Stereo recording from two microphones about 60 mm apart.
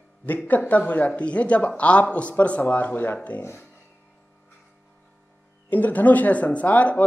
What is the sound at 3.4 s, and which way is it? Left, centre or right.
Speech, left.